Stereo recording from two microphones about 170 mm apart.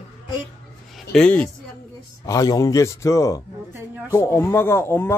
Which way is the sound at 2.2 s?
20° left (ahead or behind).